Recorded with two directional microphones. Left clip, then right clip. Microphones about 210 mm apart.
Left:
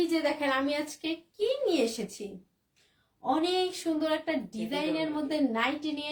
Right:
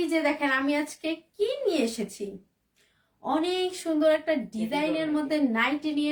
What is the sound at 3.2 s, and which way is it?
Speech, 20° right (ahead or behind).